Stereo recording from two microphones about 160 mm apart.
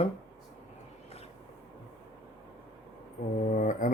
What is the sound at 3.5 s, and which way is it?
Speech, 55° left (ahead or behind).